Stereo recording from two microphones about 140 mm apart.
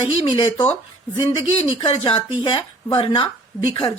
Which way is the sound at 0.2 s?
35° left (ahead or behind).